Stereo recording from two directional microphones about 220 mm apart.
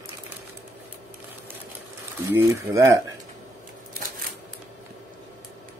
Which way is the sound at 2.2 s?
10° right (ahead or behind).